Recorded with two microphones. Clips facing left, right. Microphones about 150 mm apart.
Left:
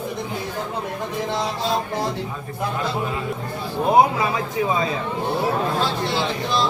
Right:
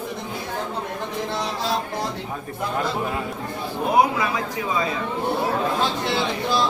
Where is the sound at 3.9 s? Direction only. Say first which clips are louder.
Left 2 dB; 25° left (ahead or behind).